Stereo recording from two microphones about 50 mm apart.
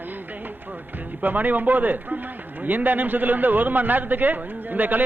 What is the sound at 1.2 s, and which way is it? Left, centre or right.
A man's voice, right.